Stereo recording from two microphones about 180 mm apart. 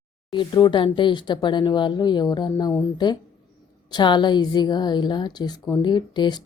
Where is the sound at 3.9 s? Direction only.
25° left (ahead or behind).